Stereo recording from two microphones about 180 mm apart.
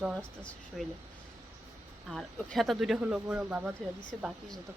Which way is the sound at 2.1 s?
Centre (ahead or behind).